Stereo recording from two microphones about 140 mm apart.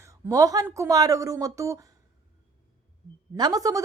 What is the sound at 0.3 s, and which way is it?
A woman's voice, 25° right (ahead or behind).